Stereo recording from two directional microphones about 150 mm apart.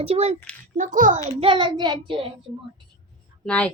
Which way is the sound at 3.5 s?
10° left (ahead or behind).